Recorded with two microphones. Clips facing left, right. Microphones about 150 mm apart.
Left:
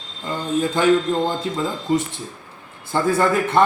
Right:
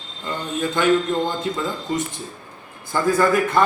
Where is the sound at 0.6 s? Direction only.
35° left (ahead or behind).